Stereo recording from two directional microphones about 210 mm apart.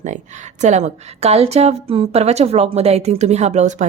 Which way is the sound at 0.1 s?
35° right (ahead or behind).